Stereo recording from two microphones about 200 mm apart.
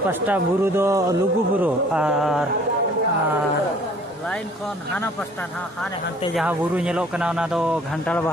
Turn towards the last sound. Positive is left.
turn(degrees=-5)  # may be behind; listen again after turning